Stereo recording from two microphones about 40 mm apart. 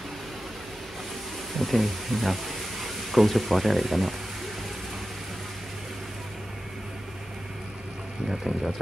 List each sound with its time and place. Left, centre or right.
1.6 s speech: centre
8.3 s speech: centre